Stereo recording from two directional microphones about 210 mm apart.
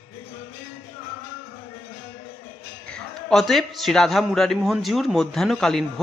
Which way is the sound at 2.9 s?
Centre (ahead or behind).